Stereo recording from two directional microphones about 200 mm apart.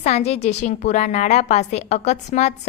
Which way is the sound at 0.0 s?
30° left (ahead or behind).